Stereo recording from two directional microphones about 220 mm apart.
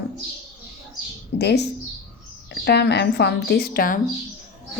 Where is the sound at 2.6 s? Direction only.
50° left (ahead or behind).